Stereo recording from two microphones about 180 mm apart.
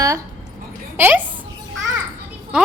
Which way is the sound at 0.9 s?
10° right (ahead or behind).